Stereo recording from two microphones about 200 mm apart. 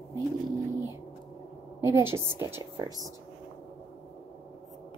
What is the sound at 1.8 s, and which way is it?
A woman's voice, 10° right (ahead or behind).